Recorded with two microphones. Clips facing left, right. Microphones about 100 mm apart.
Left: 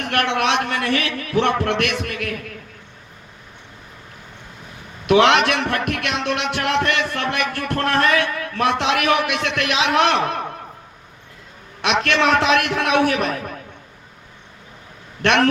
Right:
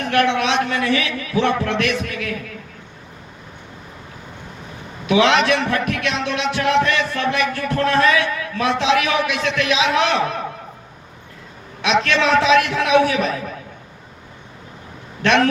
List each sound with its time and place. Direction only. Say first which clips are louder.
0.0 s a man's voice: right 2 dB; 60° left (ahead or behind)
5.0 s a man's voice: left 1 dB; 60° left (ahead or behind)
11.8 s a man's voice: right 1 dB; 60° left (ahead or behind)
15.2 s a man's voice: right 1 dB; 60° left (ahead or behind)